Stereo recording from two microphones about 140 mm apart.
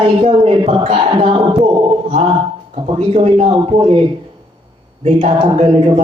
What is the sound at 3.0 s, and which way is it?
Speech, 45° right (ahead or behind).